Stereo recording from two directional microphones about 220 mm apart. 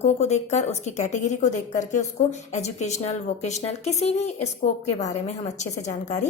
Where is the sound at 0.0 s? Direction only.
30° left (ahead or behind).